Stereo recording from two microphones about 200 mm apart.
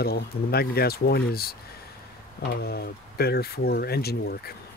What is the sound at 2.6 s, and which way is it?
Speech, 50° left (ahead or behind).